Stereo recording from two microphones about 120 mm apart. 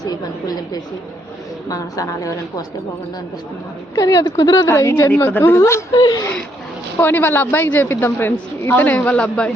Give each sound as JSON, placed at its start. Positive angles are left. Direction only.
{"t": 0.0, "sound": "a sound", "side_deg": 35}
{"t": 1.7, "sound": "a woman's voice", "side_deg": 30}
{"t": 3.9, "sound": "a woman's voice", "side_deg": 30}
{"t": 5.9, "sound": "speech", "side_deg": 35}
{"t": 7.0, "sound": "a woman's voice", "side_deg": 15}